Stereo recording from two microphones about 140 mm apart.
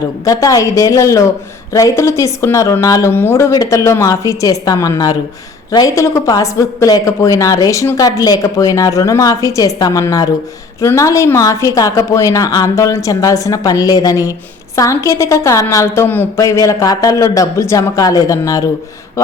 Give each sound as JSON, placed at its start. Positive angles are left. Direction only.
{"t": 0.3, "sound": "a woman's voice", "side_deg": 25}